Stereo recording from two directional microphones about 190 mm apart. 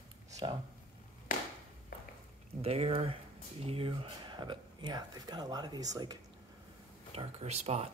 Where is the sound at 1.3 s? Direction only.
45° left (ahead or behind).